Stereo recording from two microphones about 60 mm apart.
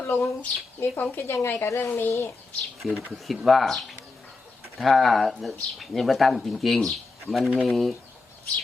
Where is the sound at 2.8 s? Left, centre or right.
Centre.